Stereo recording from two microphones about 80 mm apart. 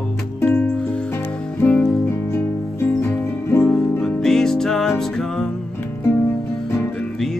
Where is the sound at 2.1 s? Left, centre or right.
Left.